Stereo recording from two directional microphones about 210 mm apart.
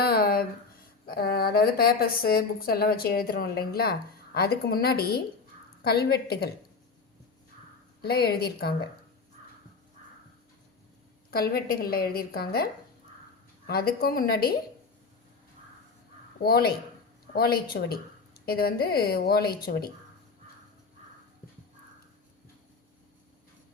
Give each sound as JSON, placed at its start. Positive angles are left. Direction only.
{"t": 0.0, "sound": "a sound", "side_deg": 45}
{"t": 1.0, "sound": "a woman's voice", "side_deg": 45}
{"t": 8.0, "sound": "a woman's voice", "side_deg": 50}
{"t": 11.3, "sound": "a woman's voice", "side_deg": 45}
{"t": 13.7, "sound": "a woman's voice", "side_deg": 45}
{"t": 16.4, "sound": "a woman's voice", "side_deg": 45}